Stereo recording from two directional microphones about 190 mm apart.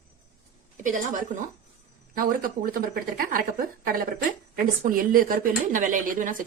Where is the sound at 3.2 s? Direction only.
50° right (ahead or behind).